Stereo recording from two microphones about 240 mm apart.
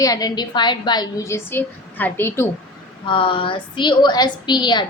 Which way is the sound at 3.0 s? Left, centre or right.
Left.